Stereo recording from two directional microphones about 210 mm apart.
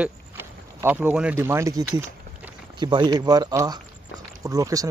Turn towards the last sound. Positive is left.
turn(degrees=-15)  # may be behind; listen again after turning